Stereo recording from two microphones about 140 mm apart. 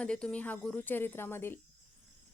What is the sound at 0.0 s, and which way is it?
Speech, 5° left (ahead or behind).